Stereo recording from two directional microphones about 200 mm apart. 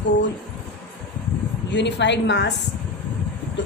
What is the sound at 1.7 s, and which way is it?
Speech, 60° left (ahead or behind).